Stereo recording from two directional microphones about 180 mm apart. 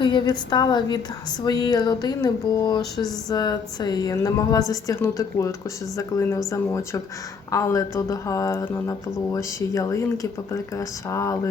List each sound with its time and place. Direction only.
0.0 s a woman's voice: 25° left (ahead or behind)